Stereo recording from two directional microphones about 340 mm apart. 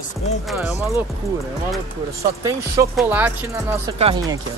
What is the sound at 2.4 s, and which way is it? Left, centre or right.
Speech, centre.